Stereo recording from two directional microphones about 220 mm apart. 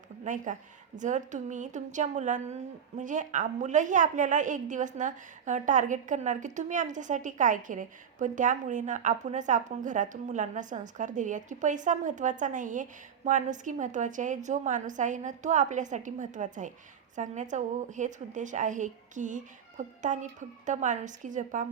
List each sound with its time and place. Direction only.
0.3 s a woman's voice: 35° right (ahead or behind)